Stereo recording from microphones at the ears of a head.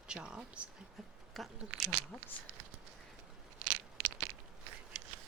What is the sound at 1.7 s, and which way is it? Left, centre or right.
Speech, right.